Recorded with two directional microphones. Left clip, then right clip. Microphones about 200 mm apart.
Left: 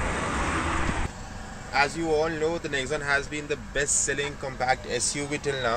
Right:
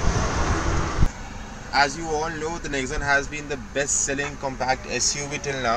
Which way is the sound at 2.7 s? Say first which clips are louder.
Right 3 dB; 50° left (ahead or behind).